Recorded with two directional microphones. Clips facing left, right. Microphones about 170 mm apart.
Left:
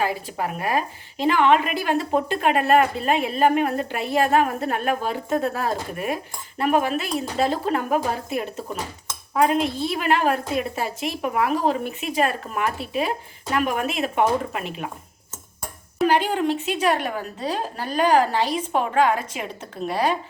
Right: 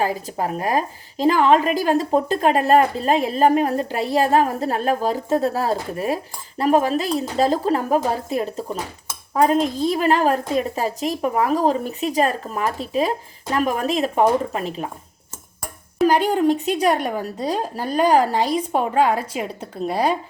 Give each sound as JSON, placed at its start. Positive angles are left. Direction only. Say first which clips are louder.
{"t": 0.0, "sound": "a woman's voice", "louder": "right 2 dB", "side_deg": -40}
{"t": 16.0, "sound": "a woman's voice", "louder": "right 4 dB", "side_deg": -40}